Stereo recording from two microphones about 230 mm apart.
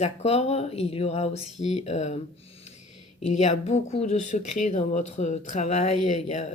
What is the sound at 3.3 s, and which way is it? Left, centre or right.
Speech, left.